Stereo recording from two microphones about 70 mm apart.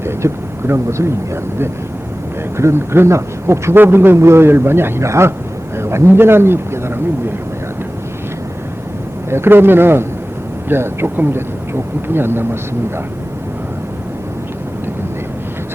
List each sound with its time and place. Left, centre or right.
0.0 s a man's voice: right
9.3 s a man's voice: right